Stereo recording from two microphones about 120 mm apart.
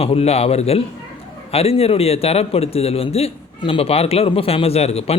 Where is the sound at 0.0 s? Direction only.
55° left (ahead or behind).